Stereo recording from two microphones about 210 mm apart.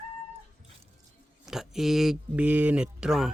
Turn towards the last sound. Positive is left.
turn(degrees=-5)  # may be behind; listen again after turning